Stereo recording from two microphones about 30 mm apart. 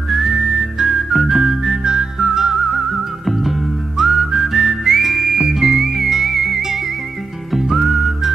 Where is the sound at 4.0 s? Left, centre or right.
Centre.